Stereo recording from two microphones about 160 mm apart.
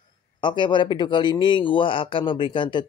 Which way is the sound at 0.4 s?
30° left (ahead or behind).